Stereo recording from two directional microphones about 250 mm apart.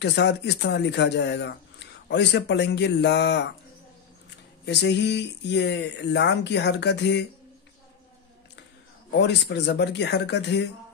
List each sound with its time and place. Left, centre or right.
0.0 s speech: left
4.6 s speech: left
9.2 s speech: left